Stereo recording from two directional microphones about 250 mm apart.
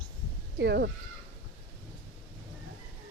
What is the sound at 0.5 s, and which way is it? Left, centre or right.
Speech, right.